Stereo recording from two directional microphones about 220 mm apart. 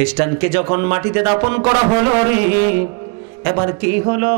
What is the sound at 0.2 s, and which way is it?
Speech, 15° right (ahead or behind).